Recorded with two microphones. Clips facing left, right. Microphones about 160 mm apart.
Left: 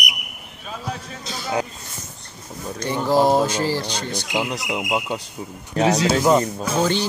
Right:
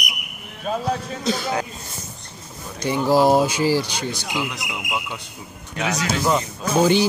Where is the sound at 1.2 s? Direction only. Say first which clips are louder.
Right 9 dB; 60° right (ahead or behind).